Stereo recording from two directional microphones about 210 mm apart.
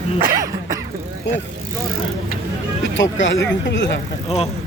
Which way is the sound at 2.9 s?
60° left (ahead or behind).